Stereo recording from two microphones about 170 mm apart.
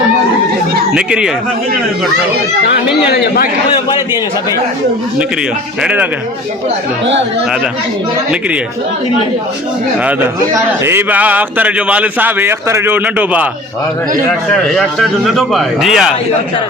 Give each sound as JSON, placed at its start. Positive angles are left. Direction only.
{"t": 0.9, "sound": "speech", "side_deg": -5}
{"t": 3.1, "sound": "a man's voice", "side_deg": 60}
{"t": 5.8, "sound": "a man's voice", "side_deg": -5}
{"t": 10.0, "sound": "a man's voice", "side_deg": -10}
{"t": 14.3, "sound": "speech", "side_deg": 5}